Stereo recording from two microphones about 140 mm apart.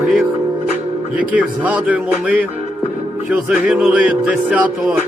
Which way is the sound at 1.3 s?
10° right (ahead or behind).